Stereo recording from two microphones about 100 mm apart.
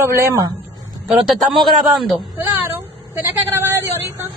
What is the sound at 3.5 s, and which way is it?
Vehicle, 25° right (ahead or behind).